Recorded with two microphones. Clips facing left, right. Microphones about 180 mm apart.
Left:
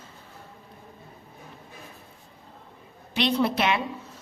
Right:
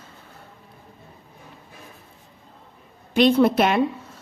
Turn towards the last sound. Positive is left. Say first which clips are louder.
# right 7 dB
turn(degrees=-50)  # may be behind; listen again after turning